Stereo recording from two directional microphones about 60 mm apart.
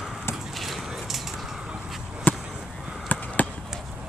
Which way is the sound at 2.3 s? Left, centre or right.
Left.